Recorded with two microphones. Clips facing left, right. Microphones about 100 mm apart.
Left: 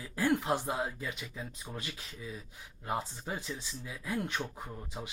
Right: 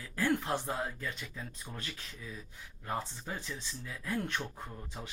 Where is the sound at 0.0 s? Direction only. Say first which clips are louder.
Left 2 dB; 15° left (ahead or behind).